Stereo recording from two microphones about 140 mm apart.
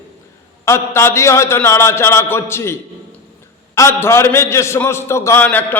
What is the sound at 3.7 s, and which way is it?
A man's voice, 20° left (ahead or behind).